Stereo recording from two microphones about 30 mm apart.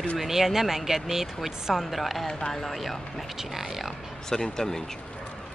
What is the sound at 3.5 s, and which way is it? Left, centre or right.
Speech, centre.